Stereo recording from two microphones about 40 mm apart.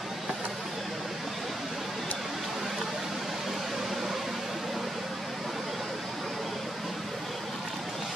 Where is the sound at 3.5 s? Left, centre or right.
Centre.